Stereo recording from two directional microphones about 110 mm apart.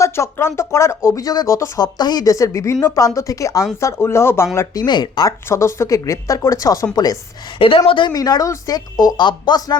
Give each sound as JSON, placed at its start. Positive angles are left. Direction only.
{"t": 0.0, "sound": "speech", "side_deg": 25}
{"t": 5.5, "sound": "speech", "side_deg": 25}
{"t": 7.9, "sound": "speech", "side_deg": 50}
{"t": 8.1, "sound": "speech", "side_deg": 35}